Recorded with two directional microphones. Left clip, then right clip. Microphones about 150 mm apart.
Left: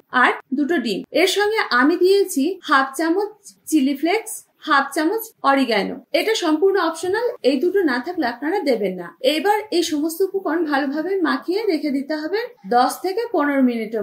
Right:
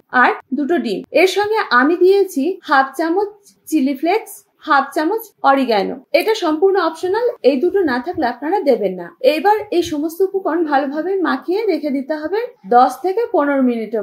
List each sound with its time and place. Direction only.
0.1 s a woman's voice: 20° right (ahead or behind)